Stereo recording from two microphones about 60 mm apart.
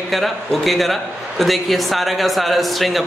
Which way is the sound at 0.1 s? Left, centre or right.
Centre.